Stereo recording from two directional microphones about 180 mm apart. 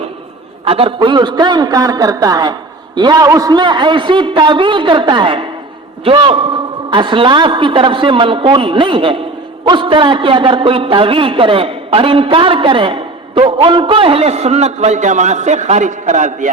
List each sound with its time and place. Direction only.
0.6 s a man's voice: 30° right (ahead or behind)